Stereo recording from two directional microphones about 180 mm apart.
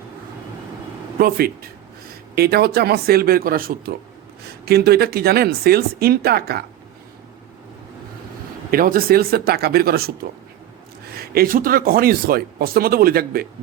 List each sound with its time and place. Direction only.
1.2 s speech: 55° right (ahead or behind)
8.7 s speech: 55° right (ahead or behind)
11.2 s speech: 55° right (ahead or behind)